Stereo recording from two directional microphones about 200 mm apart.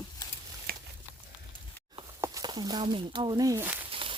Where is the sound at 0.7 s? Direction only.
50° right (ahead or behind).